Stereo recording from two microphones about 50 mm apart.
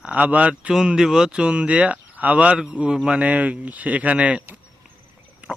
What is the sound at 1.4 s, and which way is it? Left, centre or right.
Speech, right.